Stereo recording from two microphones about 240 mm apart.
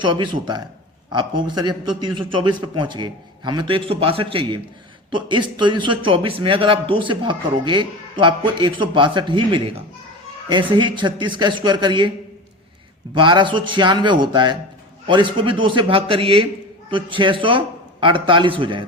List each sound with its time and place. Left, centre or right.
0.0 s speech: centre
13.1 s speech: centre